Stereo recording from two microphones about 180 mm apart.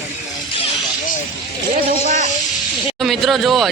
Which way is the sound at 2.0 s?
45° right (ahead or behind).